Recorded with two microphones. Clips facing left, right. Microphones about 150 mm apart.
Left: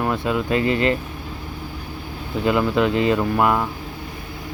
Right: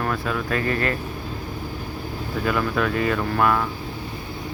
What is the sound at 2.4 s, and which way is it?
Speech, 20° left (ahead or behind).